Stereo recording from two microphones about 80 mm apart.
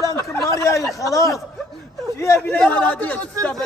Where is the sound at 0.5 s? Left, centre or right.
Left.